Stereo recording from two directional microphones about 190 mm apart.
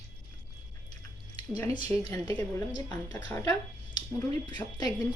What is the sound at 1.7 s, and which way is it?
A woman's voice, 15° left (ahead or behind).